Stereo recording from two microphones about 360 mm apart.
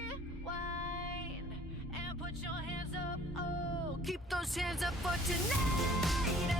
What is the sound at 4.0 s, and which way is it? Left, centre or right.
Vehicle, centre.